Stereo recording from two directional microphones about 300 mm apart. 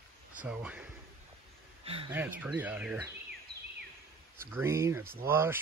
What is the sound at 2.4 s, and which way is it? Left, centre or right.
Speech, centre.